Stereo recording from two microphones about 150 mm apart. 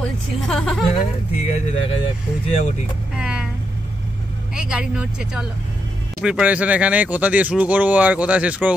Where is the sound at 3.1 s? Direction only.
5° right (ahead or behind).